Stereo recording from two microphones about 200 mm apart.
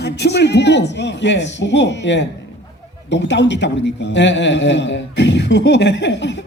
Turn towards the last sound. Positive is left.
turn(degrees=60)  # may be behind; listen again after turning